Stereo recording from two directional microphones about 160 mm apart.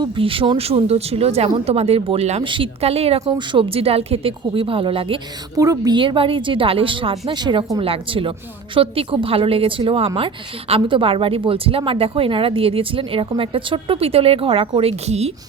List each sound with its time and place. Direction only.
0.0 s a woman's voice: 35° right (ahead or behind)
3.2 s a woman's voice: 30° right (ahead or behind)
5.5 s a woman's voice: 20° right (ahead or behind); by 15.3 s 40° right (ahead or behind)